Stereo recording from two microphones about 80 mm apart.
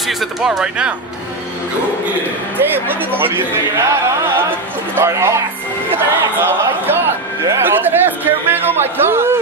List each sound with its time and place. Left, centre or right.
0.0 s speech: centre
2.5 s a man's voice: right